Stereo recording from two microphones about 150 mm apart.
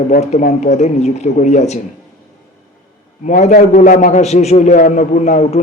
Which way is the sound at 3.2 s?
50° left (ahead or behind).